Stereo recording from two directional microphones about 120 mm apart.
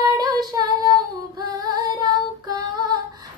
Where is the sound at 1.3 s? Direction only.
30° right (ahead or behind).